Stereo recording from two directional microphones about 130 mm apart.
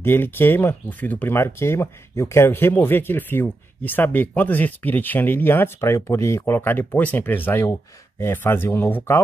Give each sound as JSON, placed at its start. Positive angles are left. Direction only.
{"t": 0.0, "sound": "speech", "side_deg": 15}